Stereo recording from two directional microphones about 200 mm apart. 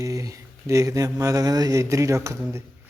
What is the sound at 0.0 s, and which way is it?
Speech, 15° right (ahead or behind).